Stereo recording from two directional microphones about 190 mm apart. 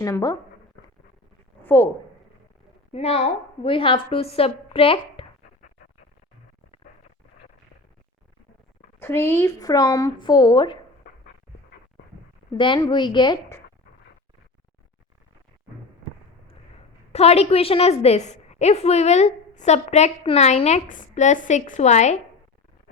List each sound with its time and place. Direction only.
0.0 s speech: 20° left (ahead or behind)
1.6 s speech: 10° left (ahead or behind)
2.9 s a woman's voice: 35° left (ahead or behind)
9.0 s a woman's voice: 10° left (ahead or behind)
12.5 s a woman's voice: 25° left (ahead or behind)
17.1 s a woman's voice: 35° left (ahead or behind)